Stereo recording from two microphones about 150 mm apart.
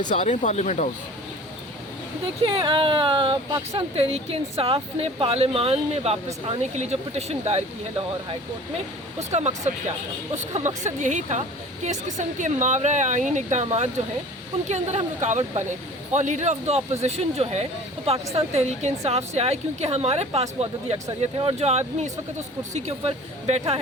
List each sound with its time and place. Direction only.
0.1 s speech: 55° left (ahead or behind)
2.2 s speech: 35° right (ahead or behind)
9.3 s speech: 50° right (ahead or behind)